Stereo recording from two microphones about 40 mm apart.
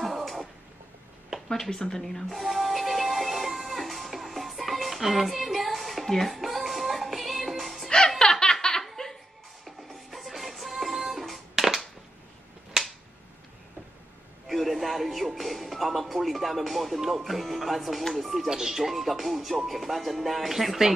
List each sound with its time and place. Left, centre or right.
0.0 s throat clearing: centre
1.5 s speech: centre
2.2 s music: centre
8.2 s laughter: centre
9.7 s music: centre
11.5 s crushing: centre
14.5 s speech: centre